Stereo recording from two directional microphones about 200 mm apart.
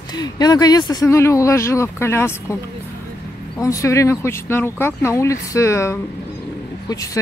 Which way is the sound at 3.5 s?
15° left (ahead or behind).